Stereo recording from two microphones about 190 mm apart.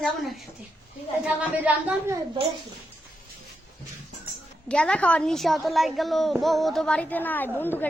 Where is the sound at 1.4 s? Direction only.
5° right (ahead or behind).